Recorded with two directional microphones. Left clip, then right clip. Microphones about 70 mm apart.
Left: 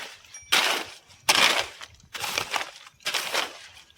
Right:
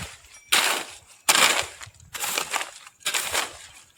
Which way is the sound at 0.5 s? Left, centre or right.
Right.